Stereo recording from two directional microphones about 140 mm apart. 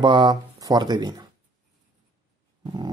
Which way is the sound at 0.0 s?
30° right (ahead or behind).